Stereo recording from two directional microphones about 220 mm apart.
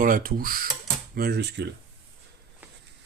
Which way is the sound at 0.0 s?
40° right (ahead or behind).